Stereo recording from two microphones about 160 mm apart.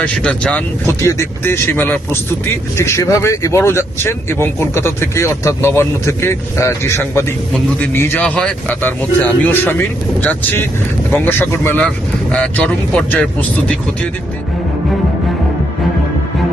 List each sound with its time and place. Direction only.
0.0 s speech: 5° left (ahead or behind)